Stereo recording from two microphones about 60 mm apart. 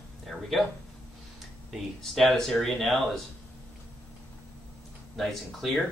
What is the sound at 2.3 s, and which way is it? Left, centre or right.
Speech, centre.